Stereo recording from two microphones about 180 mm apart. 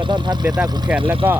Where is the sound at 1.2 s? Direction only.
15° right (ahead or behind).